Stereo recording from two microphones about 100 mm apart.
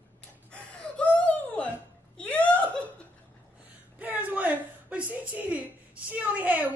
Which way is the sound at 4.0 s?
15° right (ahead or behind).